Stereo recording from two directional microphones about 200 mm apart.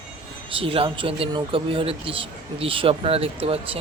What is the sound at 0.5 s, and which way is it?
Speech, 25° right (ahead or behind).